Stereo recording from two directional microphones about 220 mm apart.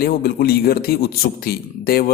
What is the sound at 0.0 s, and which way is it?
Speech, 45° left (ahead or behind).